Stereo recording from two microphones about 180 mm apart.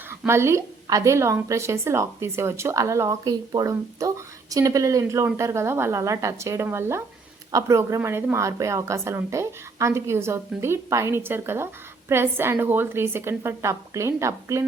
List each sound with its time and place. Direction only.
0.3 s a woman's voice: 15° right (ahead or behind)